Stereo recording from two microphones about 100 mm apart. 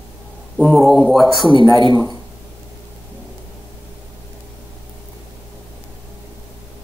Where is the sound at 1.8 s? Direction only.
45° right (ahead or behind).